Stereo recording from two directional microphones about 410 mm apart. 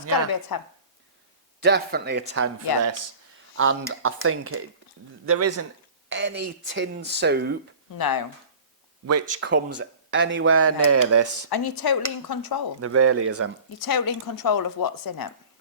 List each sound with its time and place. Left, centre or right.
0.5 s speech: left
1.6 s speech: right
3.6 s speech: right
6.1 s speech: right
7.9 s speech: left
9.0 s speech: right
9.5 s speech: right
11.4 s speech: left
12.8 s speech: right
13.7 s speech: left